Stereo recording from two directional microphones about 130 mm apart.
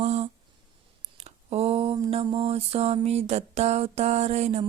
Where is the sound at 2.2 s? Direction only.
45° right (ahead or behind).